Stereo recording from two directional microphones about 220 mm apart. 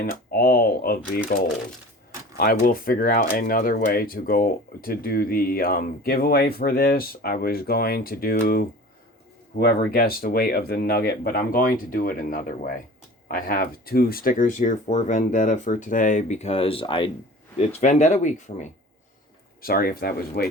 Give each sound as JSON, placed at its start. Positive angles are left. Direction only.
{"t": 0.0, "sound": "speech", "side_deg": 45}
{"t": 2.4, "sound": "speech", "side_deg": 45}